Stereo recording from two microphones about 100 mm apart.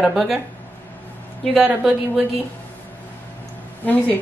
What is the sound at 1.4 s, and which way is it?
Speech, 5° left (ahead or behind).